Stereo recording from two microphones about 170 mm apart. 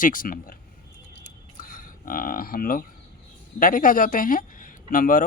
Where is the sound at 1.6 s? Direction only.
50° left (ahead or behind).